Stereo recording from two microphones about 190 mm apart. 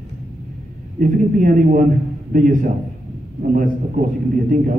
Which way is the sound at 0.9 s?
45° right (ahead or behind).